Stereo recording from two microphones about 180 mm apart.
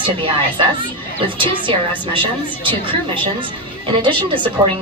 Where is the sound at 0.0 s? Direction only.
30° right (ahead or behind).